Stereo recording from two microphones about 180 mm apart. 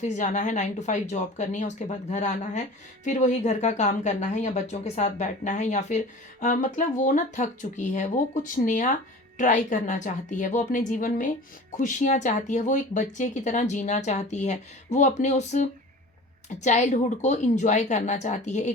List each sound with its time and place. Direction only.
0.0 s speech: 40° left (ahead or behind)